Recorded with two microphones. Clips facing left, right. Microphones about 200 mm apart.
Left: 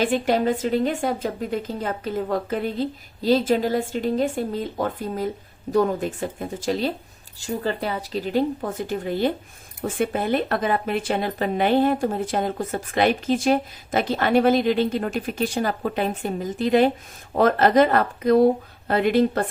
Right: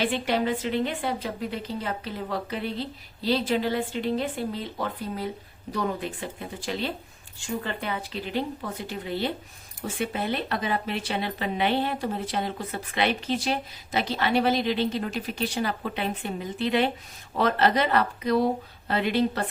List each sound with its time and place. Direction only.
0.0 s speech: 45° left (ahead or behind)